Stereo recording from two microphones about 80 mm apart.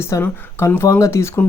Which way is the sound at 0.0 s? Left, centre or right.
Left.